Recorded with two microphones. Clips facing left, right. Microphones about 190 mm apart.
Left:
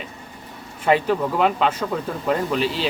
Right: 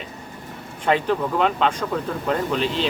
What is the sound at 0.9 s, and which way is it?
Speech, 5° left (ahead or behind).